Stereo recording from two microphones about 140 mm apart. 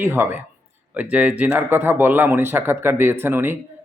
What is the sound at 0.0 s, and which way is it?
Speech, 15° right (ahead or behind).